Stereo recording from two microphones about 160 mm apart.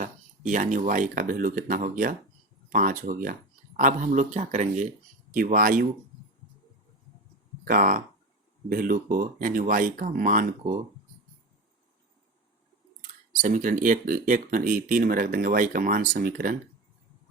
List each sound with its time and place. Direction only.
0.0 s speech: 50° right (ahead or behind)
7.6 s speech: 60° right (ahead or behind)
13.0 s speech: 55° right (ahead or behind)